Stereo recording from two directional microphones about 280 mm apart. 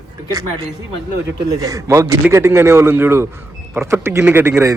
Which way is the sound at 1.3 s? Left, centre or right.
Centre.